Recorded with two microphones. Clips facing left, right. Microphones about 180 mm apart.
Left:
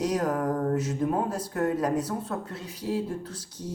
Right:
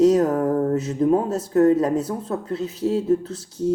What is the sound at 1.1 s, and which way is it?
Speech, 25° right (ahead or behind).